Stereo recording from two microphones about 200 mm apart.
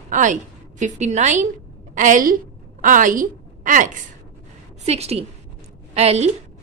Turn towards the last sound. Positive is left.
turn(degrees=-35)  # may be behind; listen again after turning